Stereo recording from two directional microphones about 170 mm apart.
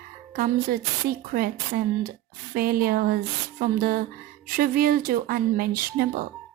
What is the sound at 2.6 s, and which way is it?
Speech, 60° right (ahead or behind).